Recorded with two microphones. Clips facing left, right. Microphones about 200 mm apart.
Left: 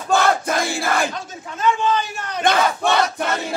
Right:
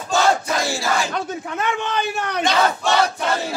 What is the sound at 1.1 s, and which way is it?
A man's voice, 65° right (ahead or behind).